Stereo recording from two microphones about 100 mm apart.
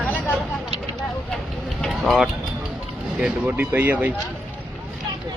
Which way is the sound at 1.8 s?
Centre (ahead or behind).